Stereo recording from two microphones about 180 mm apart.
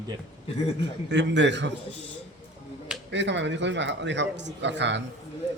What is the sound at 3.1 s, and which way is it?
A man's voice, 80° right.